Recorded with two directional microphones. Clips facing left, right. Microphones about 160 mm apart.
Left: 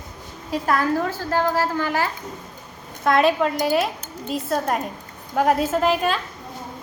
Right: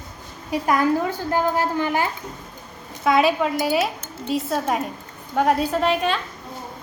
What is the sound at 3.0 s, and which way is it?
Speech, centre (ahead or behind).